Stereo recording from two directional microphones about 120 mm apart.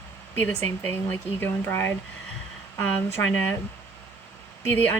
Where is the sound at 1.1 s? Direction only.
15° left (ahead or behind).